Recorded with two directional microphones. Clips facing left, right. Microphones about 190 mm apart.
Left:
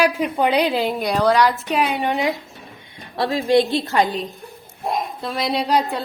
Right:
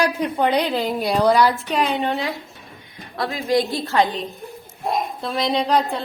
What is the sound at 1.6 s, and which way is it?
Speech, 10° left (ahead or behind).